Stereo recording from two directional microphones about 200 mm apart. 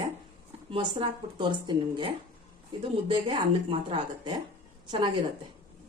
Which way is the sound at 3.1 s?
25° right (ahead or behind).